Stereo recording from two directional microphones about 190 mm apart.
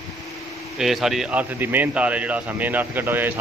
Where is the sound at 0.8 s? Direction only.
Centre (ahead or behind).